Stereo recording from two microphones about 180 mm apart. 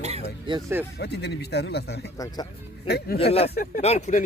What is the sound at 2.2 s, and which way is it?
Speech, 20° left (ahead or behind).